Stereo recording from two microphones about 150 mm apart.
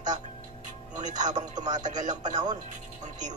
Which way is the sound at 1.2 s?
55° right (ahead or behind).